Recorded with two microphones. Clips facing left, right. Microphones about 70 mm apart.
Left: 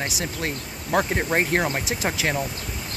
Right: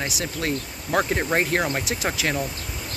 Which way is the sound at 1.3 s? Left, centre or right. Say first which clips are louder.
Left 1 dB; centre.